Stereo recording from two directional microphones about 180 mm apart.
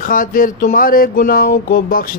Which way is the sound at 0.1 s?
50° left (ahead or behind).